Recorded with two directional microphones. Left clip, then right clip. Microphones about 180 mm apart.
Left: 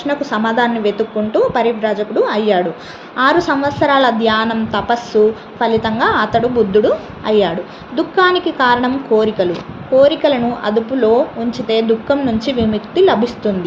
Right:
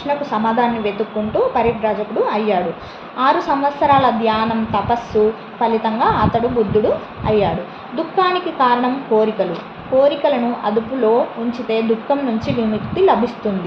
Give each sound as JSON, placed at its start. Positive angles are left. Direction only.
{"t": 0.1, "sound": "a woman's voice", "side_deg": 50}